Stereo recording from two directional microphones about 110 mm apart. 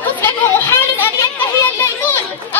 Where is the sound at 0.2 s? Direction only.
20° left (ahead or behind).